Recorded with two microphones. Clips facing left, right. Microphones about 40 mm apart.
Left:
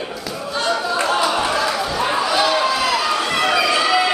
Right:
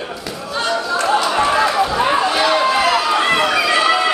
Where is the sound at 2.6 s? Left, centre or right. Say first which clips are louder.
Right 4 dB; right.